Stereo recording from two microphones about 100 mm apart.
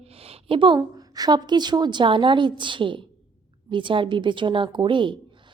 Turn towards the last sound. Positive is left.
turn(degrees=-55)  # may be behind; listen again after turning